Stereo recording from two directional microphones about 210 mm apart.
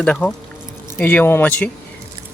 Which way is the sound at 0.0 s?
5° left (ahead or behind).